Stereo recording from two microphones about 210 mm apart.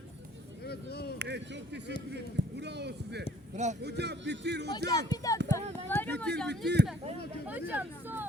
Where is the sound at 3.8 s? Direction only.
50° right (ahead or behind).